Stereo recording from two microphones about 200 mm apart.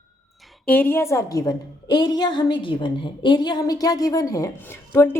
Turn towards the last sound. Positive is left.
turn(degrees=10)  # may be behind; listen again after turning